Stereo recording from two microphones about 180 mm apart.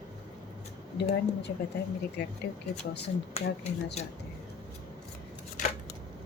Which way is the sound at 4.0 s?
35° left (ahead or behind).